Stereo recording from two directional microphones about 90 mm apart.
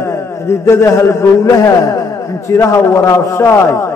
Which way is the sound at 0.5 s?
30° left (ahead or behind).